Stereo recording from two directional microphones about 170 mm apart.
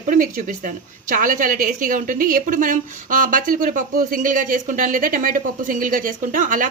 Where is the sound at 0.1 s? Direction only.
55° right (ahead or behind).